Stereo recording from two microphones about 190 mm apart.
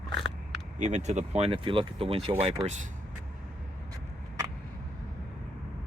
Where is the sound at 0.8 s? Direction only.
40° right (ahead or behind).